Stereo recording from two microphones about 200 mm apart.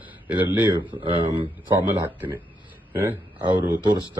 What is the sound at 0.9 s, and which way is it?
Speech, 25° right (ahead or behind).